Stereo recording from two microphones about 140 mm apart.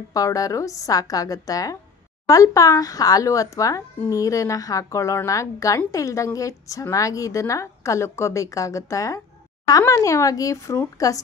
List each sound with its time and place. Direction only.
0.1 s speech: 25° left (ahead or behind)